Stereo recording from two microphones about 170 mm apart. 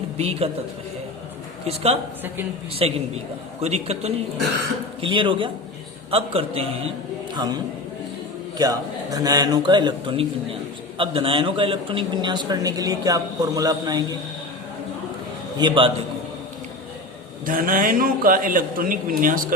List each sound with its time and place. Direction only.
0.2 s a man's voice: 35° right (ahead or behind)
1.6 s a man's voice: 35° right (ahead or behind)
8.5 s speech: 20° right (ahead or behind)
15.5 s speech: 30° right (ahead or behind)
17.4 s a man's voice: 55° right (ahead or behind)